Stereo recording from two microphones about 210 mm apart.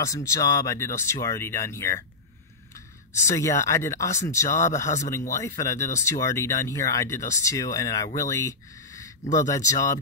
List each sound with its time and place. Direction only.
0.0 s speech: 15° left (ahead or behind)
3.3 s speech: 15° left (ahead or behind)